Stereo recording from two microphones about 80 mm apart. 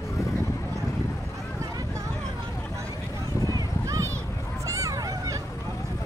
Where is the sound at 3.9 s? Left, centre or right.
Right.